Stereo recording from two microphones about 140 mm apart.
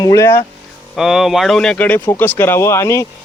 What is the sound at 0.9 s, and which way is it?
Speech, centre (ahead or behind).